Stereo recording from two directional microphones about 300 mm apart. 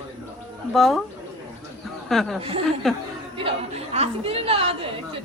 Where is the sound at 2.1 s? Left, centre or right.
Centre.